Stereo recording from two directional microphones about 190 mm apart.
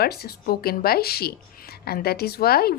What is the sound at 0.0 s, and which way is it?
A woman's voice, 55° left (ahead or behind).